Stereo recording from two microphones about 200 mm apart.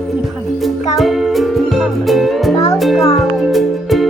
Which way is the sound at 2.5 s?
15° left (ahead or behind).